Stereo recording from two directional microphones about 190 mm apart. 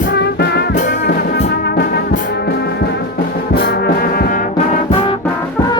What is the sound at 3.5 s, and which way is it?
Brass instrument, 55° left (ahead or behind).